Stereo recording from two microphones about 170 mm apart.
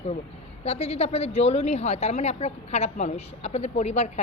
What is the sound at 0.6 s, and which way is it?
Speech, 35° left (ahead or behind).